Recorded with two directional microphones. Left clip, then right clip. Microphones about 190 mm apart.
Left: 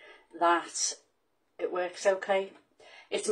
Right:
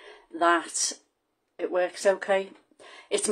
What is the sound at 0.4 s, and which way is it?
Speech, 55° right (ahead or behind).